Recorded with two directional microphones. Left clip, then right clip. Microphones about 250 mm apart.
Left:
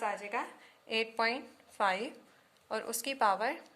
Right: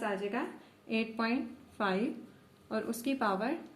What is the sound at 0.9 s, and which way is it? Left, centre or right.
A woman's voice, left.